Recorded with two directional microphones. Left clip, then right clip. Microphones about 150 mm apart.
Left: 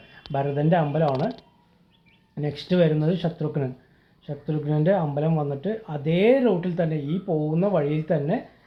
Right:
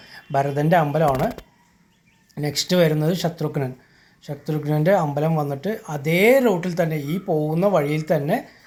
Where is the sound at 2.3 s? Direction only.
20° right (ahead or behind).